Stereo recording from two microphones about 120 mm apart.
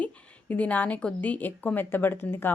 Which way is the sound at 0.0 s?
15° left (ahead or behind).